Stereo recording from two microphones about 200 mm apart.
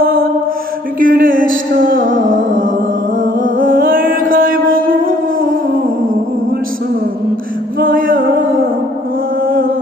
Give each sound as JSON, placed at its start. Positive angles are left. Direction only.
{"t": 0.0, "sound": "mantra", "side_deg": -45}
{"t": 0.9, "sound": "a sound", "side_deg": -45}
{"t": 3.4, "sound": "mantra", "side_deg": -45}
{"t": 7.8, "sound": "music", "side_deg": -45}
{"t": 9.5, "sound": "mantra", "side_deg": -45}